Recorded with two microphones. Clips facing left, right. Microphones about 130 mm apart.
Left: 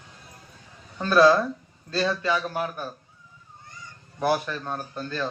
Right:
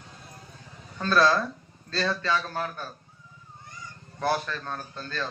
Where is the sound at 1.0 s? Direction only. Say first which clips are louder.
Left 5 dB; 15° left (ahead or behind).